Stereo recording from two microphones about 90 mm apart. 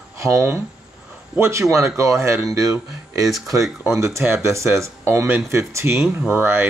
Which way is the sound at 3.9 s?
30° right (ahead or behind).